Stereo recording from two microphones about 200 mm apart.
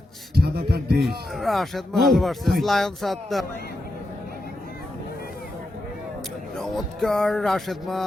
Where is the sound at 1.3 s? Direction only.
Centre (ahead or behind).